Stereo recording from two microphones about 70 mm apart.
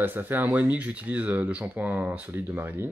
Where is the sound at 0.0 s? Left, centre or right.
Right.